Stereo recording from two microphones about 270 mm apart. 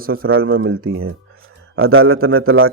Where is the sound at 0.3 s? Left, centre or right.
Right.